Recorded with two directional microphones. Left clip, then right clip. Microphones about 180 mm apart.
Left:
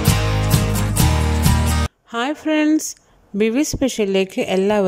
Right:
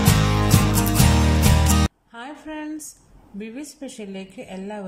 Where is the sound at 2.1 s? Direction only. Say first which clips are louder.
Left 15 dB; 60° left (ahead or behind).